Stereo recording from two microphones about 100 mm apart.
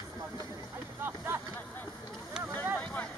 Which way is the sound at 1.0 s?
20° right (ahead or behind).